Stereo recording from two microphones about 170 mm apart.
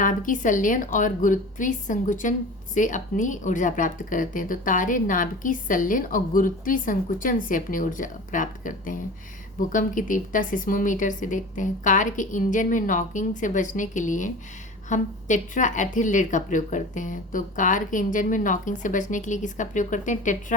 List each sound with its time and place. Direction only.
0.0 s a woman's voice: 50° left (ahead or behind)